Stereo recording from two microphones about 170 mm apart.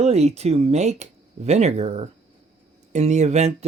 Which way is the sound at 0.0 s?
40° right (ahead or behind).